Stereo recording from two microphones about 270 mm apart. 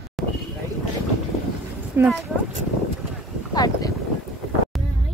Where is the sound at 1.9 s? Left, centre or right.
Centre.